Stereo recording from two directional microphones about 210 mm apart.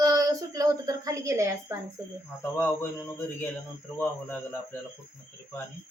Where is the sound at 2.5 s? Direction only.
10° left (ahead or behind).